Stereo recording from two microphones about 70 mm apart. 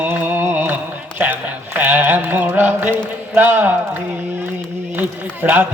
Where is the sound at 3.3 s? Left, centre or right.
Right.